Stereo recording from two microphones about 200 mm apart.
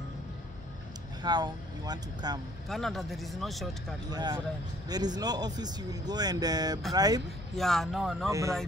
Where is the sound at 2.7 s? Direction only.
Centre (ahead or behind).